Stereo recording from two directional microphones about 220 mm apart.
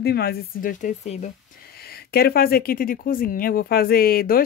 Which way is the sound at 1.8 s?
45° left (ahead or behind).